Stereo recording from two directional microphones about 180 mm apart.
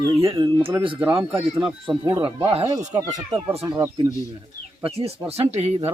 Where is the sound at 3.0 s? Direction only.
20° right (ahead or behind).